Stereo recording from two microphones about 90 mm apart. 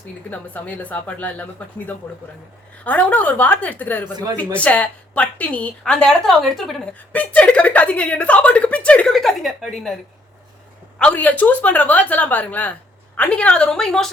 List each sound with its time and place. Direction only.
0.3 s a woman's voice: 15° left (ahead or behind)
2.8 s a woman's voice: 15° left (ahead or behind); by 6.8 s centre (ahead or behind)
7.1 s a woman's voice: 15° left (ahead or behind)
9.1 s a woman's voice: centre (ahead or behind)
10.9 s a woman's voice: 15° left (ahead or behind)